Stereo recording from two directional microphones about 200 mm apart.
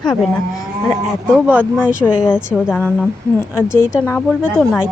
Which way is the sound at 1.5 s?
5° right (ahead or behind).